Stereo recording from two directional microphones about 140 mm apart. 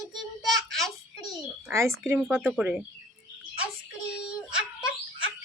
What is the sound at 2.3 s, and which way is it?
Speech, 5° right (ahead or behind).